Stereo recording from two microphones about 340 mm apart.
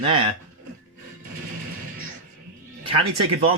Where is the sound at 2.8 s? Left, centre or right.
Centre.